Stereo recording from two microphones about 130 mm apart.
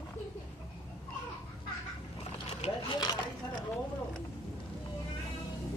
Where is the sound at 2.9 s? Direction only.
35° left (ahead or behind).